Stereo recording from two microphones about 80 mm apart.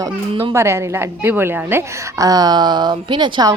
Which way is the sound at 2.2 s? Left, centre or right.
Right.